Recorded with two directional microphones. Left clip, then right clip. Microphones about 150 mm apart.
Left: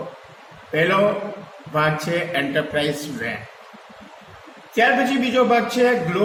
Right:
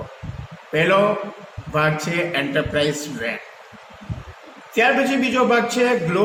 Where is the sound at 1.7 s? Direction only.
35° right (ahead or behind).